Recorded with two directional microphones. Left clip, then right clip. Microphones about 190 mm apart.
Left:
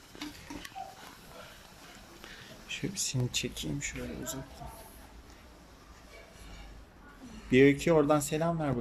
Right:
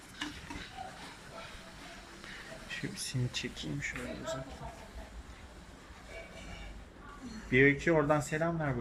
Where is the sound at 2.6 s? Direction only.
15° left (ahead or behind).